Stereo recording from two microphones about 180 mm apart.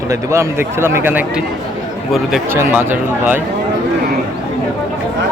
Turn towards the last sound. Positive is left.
turn(degrees=-10)  # may be behind; listen again after turning